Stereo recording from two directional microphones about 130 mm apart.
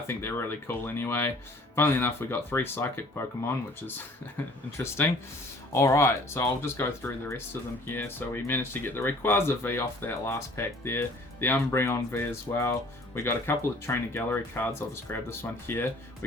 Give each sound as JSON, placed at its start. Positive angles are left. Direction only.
{"t": 0.1, "sound": "speech", "side_deg": 20}